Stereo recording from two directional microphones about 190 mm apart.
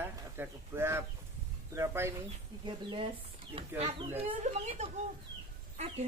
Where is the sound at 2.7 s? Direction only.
30° right (ahead or behind).